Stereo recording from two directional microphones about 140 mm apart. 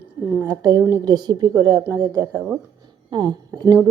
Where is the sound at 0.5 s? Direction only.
25° right (ahead or behind).